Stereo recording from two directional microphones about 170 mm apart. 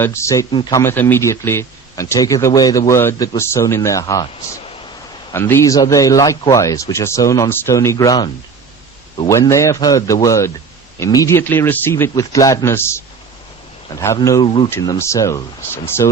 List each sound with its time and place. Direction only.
0.0 s speech: 15° left (ahead or behind)
14.7 s speech: 15° left (ahead or behind)